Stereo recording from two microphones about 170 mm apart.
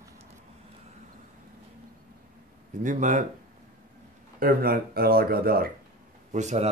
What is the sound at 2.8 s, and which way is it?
Speech, 50° right (ahead or behind).